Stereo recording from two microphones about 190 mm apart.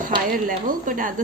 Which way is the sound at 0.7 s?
45° right (ahead or behind).